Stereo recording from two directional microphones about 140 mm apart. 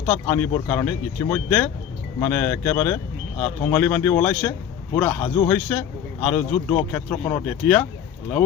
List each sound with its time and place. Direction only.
0.0 s a man's voice: 15° left (ahead or behind)